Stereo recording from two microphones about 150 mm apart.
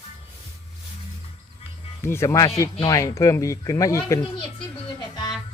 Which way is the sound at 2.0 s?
15° left (ahead or behind).